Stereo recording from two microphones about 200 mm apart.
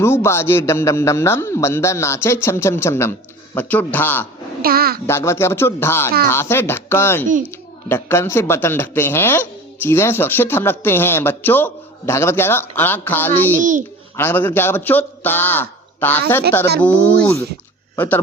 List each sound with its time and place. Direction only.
0.0 s speech: 10° left (ahead or behind)
4.6 s a child's voice: 50° right (ahead or behind)
5.0 s speech: 10° left (ahead or behind)
13.6 s a child's voice: 40° right (ahead or behind)
14.2 s speech: 10° left (ahead or behind)